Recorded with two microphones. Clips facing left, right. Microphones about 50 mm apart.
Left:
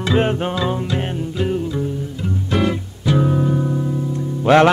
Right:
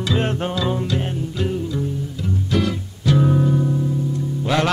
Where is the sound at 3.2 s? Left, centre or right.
Centre.